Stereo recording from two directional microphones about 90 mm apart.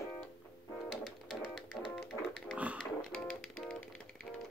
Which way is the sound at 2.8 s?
10° left (ahead or behind).